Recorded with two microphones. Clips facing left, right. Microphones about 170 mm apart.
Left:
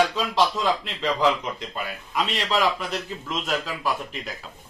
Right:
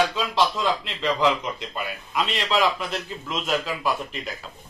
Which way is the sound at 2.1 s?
5° left (ahead or behind).